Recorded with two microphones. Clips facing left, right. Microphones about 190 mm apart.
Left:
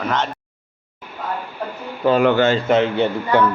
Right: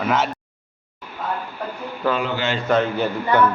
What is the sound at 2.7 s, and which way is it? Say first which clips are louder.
Speech: left 3 dB; 25° left (ahead or behind).